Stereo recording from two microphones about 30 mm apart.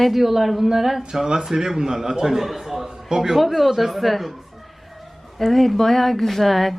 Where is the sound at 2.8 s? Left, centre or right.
Centre.